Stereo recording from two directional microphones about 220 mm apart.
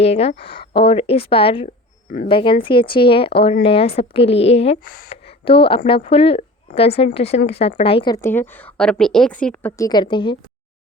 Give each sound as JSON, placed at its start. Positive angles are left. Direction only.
{"t": 0.0, "sound": "speech", "side_deg": 25}